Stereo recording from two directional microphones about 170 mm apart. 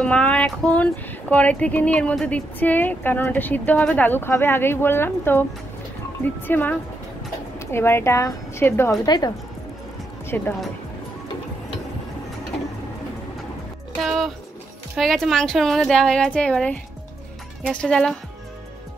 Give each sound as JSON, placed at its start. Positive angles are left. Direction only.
{"t": 0.0, "sound": "speech", "side_deg": 5}
{"t": 10.3, "sound": "speech", "side_deg": 10}
{"t": 14.0, "sound": "a woman's voice", "side_deg": 0}